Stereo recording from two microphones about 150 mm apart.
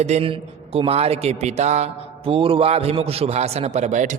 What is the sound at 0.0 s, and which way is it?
A man's voice, 45° right (ahead or behind).